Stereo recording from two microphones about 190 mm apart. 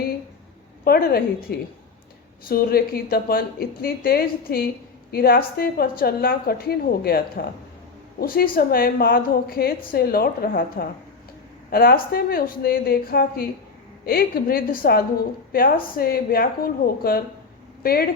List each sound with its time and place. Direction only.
0.9 s a woman's voice: 55° left (ahead or behind)